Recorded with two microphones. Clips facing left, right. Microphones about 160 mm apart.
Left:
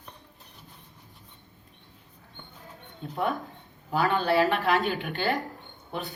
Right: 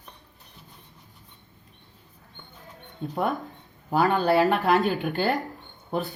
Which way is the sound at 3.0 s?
40° right (ahead or behind).